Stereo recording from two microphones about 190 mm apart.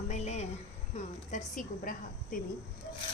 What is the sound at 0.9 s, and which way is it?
Speech, 40° left (ahead or behind).